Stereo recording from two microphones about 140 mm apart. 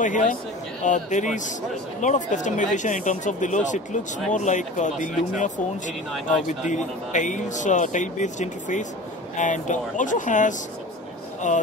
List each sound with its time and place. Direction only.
0.0 s speech: 65° left (ahead or behind)